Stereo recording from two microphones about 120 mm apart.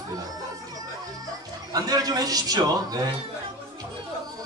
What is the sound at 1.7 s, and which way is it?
A man's voice, 30° right (ahead or behind).